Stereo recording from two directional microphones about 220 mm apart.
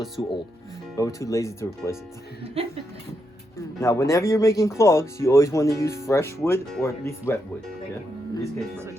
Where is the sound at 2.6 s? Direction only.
25° right (ahead or behind).